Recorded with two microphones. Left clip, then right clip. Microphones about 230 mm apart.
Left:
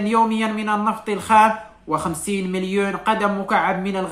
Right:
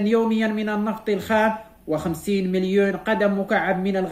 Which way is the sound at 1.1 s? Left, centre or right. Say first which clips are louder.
Left 6 dB; left.